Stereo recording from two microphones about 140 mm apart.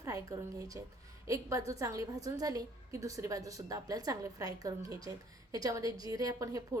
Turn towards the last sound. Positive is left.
turn(degrees=-25)  # may be behind; listen again after turning